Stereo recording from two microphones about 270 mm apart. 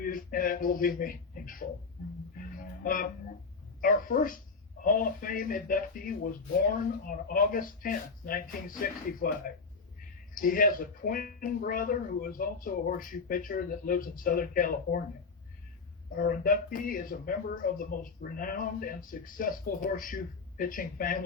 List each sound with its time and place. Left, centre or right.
0.0 s speech: left
2.8 s speech: left
10.3 s speech: left
16.1 s speech: left